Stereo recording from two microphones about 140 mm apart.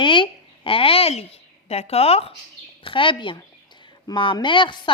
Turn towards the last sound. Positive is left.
turn(degrees=35)  # may be behind; listen again after turning